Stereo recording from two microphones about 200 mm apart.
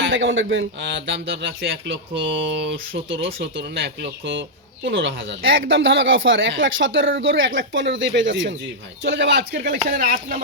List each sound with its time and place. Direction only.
0.0 s speech: 70° right (ahead or behind)
4.0 s speech: 70° right (ahead or behind); by 10.4 s 40° right (ahead or behind)